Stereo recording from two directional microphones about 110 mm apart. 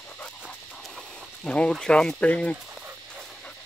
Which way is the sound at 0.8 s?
5° left (ahead or behind).